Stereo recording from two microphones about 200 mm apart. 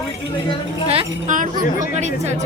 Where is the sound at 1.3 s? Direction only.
40° right (ahead or behind).